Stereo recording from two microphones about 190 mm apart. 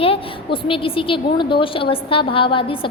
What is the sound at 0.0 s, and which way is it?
A woman's voice, 30° left (ahead or behind).